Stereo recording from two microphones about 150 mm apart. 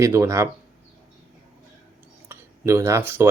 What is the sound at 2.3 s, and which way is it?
Speech, 20° right (ahead or behind).